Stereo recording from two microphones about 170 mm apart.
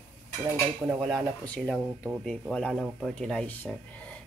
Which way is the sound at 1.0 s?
Centre (ahead or behind).